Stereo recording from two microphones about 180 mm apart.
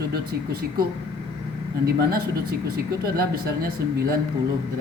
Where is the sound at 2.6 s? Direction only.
60° right (ahead or behind).